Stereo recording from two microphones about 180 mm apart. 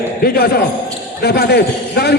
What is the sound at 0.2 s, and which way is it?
A man's voice, 55° left (ahead or behind).